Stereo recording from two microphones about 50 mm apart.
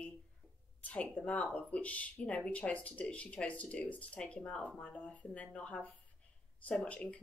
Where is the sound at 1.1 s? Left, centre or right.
Left.